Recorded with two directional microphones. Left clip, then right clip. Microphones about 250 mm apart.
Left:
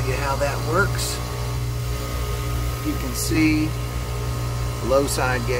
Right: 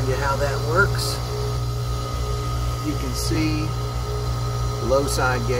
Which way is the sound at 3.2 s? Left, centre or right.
Centre.